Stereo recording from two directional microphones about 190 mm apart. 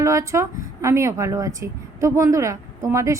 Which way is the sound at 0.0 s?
15° right (ahead or behind).